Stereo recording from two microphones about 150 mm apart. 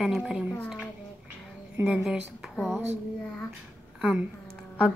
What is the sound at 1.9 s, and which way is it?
Speech, 5° right (ahead or behind).